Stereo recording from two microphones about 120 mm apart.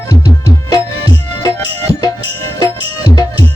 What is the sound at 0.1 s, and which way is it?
Music, 30° left (ahead or behind).